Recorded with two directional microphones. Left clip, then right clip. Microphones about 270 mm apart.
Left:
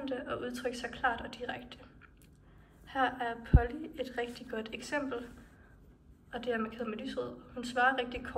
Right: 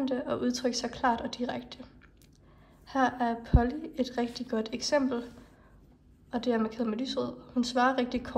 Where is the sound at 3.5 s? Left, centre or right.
Left.